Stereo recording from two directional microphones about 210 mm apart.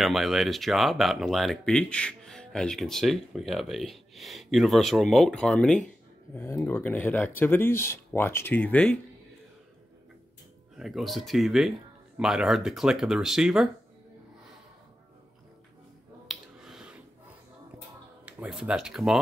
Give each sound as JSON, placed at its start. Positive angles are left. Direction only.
{"t": 0.0, "sound": "speech", "side_deg": 0}
{"t": 10.8, "sound": "speech", "side_deg": 0}
{"t": 16.3, "sound": "finger snapping", "side_deg": 0}
{"t": 18.2, "sound": "speech", "side_deg": -5}